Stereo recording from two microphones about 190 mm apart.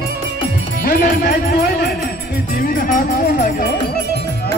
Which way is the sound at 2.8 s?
45° left (ahead or behind).